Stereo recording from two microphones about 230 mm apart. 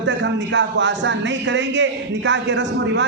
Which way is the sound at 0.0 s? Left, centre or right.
Right.